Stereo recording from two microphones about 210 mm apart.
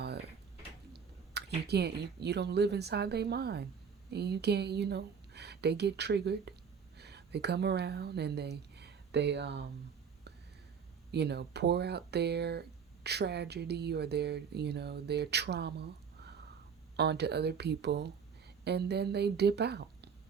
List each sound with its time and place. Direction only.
0.9 s a woman's voice: 50° right (ahead or behind)
11.1 s speech: 50° right (ahead or behind)